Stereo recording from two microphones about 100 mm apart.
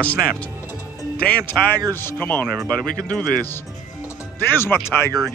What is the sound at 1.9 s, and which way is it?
Speech, 20° left (ahead or behind).